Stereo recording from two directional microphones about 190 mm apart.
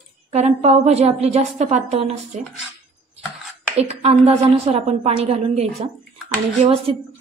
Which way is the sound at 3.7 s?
30° right (ahead or behind).